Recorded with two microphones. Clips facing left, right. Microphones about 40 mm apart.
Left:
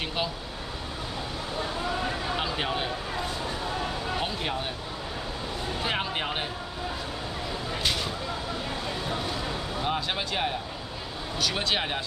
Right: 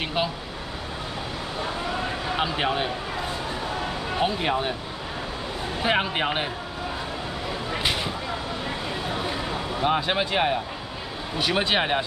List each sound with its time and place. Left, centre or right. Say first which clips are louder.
0.0 s speech: right 4 dB; centre
2.3 s speech: right 4 dB; centre
4.2 s speech: right 6 dB; centre
5.9 s speech: right 7 dB; right
7.7 s speech: right 3 dB; right
9.2 s vehicle: right 3 dB; right
11.3 s speech: right 5 dB; right